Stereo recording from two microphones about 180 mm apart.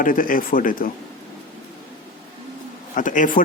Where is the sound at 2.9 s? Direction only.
45° left (ahead or behind).